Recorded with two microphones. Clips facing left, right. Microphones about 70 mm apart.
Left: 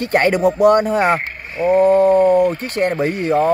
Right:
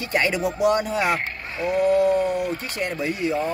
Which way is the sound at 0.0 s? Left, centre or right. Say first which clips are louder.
Left 8 dB; left.